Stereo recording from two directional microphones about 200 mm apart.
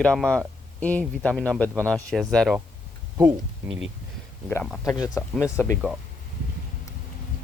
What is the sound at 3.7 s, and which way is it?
Speech, 5° right (ahead or behind).